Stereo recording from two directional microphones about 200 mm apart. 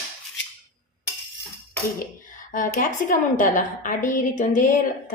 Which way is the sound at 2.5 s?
40° left (ahead or behind).